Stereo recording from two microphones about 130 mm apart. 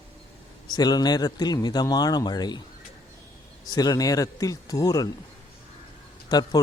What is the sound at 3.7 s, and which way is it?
Speech, 30° left (ahead or behind).